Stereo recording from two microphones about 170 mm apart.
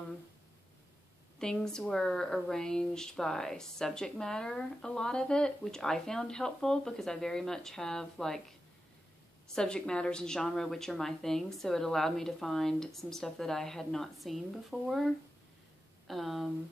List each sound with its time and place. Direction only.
1.4 s speech: 5° left (ahead or behind)
9.6 s speech: 5° left (ahead or behind)